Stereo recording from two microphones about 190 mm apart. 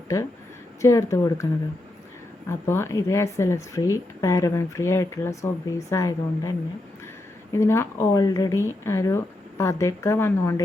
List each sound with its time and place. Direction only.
0.8 s speech: 15° left (ahead or behind)
2.5 s speech: 15° left (ahead or behind)
7.5 s speech: 15° left (ahead or behind)